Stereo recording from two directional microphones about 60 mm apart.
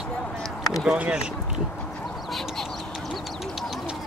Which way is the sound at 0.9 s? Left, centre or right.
Right.